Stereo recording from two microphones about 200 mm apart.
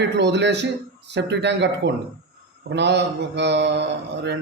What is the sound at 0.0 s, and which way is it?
A man's voice, 60° right (ahead or behind).